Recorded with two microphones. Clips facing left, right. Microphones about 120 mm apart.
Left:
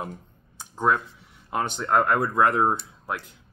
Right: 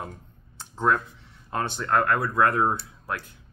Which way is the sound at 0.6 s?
10° left (ahead or behind).